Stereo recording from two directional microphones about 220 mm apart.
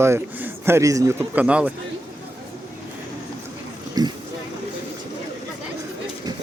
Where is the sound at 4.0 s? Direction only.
15° right (ahead or behind).